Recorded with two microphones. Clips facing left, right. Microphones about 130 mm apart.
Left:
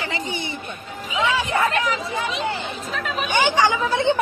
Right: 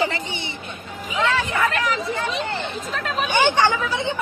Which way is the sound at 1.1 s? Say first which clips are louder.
Even; 15° left (ahead or behind).